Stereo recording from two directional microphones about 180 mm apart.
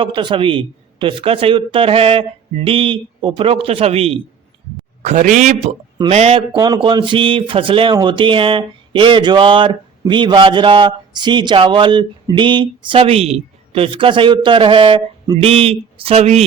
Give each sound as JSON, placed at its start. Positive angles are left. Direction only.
{"t": 0.0, "sound": "a man's voice", "side_deg": -25}